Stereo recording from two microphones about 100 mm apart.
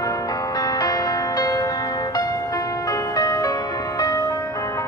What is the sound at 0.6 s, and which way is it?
Music, 40° left (ahead or behind).